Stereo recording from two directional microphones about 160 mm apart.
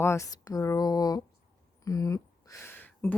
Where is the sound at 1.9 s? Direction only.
20° left (ahead or behind).